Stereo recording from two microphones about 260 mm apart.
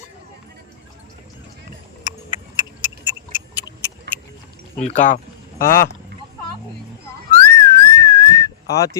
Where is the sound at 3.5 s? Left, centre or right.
Centre.